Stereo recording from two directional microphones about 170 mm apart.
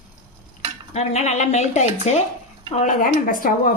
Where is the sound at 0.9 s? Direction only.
40° left (ahead or behind).